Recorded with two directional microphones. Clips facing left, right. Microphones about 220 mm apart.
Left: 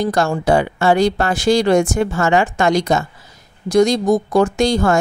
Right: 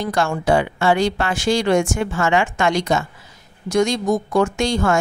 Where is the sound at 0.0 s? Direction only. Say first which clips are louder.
Left 3 dB; 40° left (ahead or behind).